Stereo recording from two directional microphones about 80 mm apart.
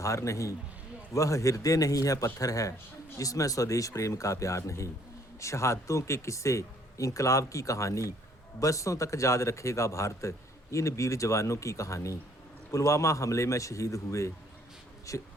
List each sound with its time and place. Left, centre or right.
0.0 s a man's voice: left